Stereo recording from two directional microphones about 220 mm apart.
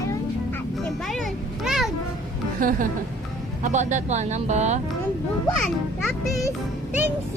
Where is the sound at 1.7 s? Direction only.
Centre (ahead or behind).